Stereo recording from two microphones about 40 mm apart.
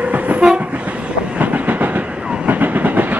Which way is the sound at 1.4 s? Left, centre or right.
Right.